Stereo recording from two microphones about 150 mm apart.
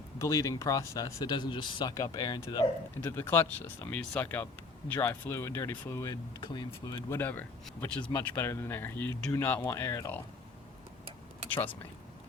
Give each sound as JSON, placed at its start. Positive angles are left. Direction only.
{"t": 0.2, "sound": "speech", "side_deg": 20}
{"t": 3.0, "sound": "speech", "side_deg": 15}
{"t": 6.5, "sound": "speech", "side_deg": 30}
{"t": 7.2, "sound": "speech", "side_deg": 10}